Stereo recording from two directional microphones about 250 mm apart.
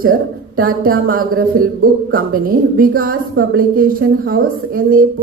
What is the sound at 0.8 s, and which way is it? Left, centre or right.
A woman's voice, right.